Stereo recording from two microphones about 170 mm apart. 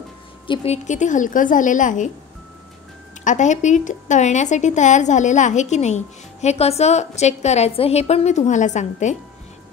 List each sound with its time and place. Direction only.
0.5 s a woman's voice: 40° left (ahead or behind)
3.3 s a woman's voice: 45° left (ahead or behind)